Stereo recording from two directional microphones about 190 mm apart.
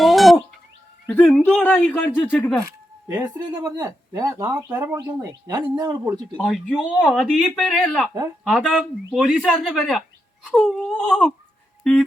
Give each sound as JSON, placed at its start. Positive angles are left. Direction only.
{"t": 0.0, "sound": "a sound", "side_deg": 0}
{"t": 1.2, "sound": "speech", "side_deg": 5}
{"t": 3.1, "sound": "speech", "side_deg": -20}
{"t": 4.9, "sound": "speech", "side_deg": -20}
{"t": 6.3, "sound": "speech", "side_deg": 0}